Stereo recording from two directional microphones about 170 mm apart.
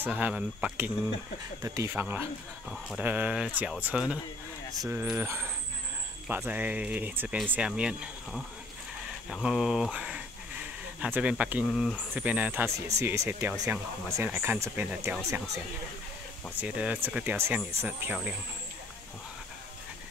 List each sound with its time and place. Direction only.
0.0 s speech: 10° right (ahead or behind)
16.5 s speech: 5° right (ahead or behind)